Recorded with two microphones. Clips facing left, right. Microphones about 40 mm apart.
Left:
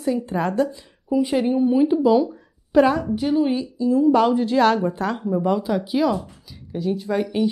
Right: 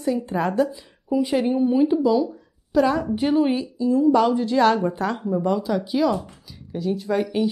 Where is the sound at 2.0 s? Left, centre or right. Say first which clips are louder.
Left 3 dB; left.